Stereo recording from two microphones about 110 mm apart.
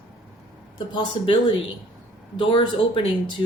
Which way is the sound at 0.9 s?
50° left (ahead or behind).